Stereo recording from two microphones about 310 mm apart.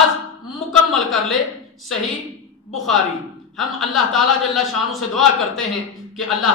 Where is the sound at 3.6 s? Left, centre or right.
Centre.